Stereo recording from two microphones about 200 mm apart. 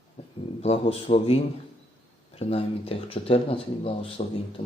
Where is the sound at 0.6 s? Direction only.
30° left (ahead or behind).